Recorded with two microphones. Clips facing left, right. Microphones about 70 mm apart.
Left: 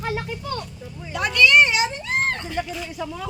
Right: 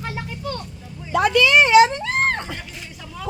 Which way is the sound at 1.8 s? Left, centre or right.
Right.